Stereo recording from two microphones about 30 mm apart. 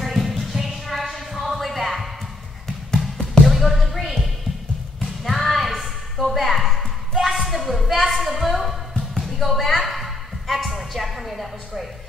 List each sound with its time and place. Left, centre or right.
0.0 s a sound: centre
0.6 s music: centre
2.9 s music: centre
3.4 s basketball bounce: centre
5.2 s a sound: centre
7.3 s music: centre